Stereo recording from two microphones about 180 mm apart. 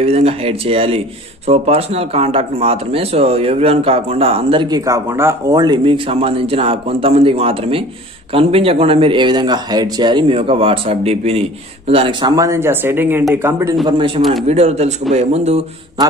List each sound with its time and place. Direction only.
0.0 s speech: 35° right (ahead or behind); by 13.7 s 15° right (ahead or behind)
13.8 s a man's voice: 30° right (ahead or behind)